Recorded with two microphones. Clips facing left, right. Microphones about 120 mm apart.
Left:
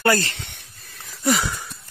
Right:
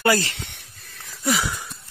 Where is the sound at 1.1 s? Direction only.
Centre (ahead or behind).